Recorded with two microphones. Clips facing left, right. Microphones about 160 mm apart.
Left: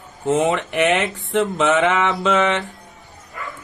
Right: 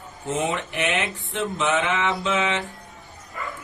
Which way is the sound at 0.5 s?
70° left (ahead or behind).